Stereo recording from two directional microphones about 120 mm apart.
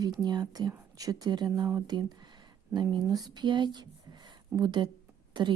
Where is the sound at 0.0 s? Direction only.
35° right (ahead or behind).